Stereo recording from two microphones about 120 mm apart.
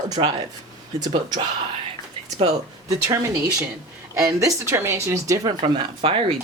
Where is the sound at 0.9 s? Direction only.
35° right (ahead or behind).